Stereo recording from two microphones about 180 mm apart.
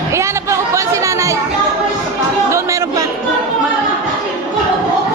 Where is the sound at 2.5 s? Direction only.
15° right (ahead or behind).